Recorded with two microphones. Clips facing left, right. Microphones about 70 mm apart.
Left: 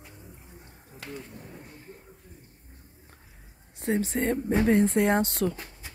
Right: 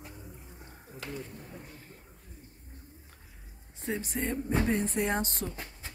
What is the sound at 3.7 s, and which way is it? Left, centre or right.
Speech, left.